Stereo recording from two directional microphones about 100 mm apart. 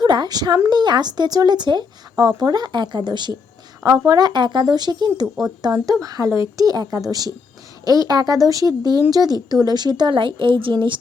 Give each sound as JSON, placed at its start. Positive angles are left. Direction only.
{"t": 0.0, "sound": "a woman's voice", "side_deg": -45}
{"t": 3.8, "sound": "speech", "side_deg": -35}
{"t": 4.3, "sound": "speech", "side_deg": -50}